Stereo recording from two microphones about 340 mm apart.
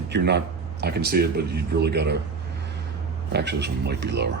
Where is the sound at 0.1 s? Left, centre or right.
Right.